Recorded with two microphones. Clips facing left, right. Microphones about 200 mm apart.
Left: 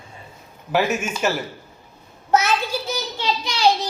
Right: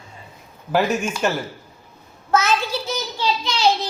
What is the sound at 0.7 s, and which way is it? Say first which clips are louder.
Child singing: right 1 dB; 5° left (ahead or behind).